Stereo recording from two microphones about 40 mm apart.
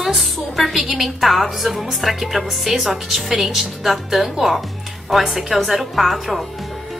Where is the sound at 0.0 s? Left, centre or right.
Centre.